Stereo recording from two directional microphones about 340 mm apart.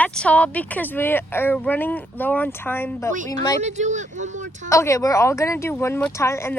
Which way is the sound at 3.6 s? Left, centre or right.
Right.